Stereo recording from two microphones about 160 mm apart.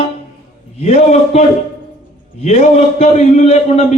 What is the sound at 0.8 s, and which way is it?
Speech, 40° left (ahead or behind).